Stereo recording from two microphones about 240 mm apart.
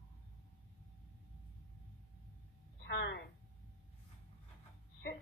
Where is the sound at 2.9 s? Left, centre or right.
Left.